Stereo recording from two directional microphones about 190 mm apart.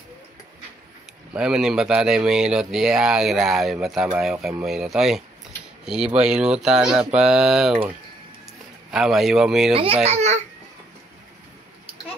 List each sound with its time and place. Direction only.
1.3 s speech: 5° right (ahead or behind)
8.9 s speech: centre (ahead or behind)
10.0 s a child's voice: 35° right (ahead or behind)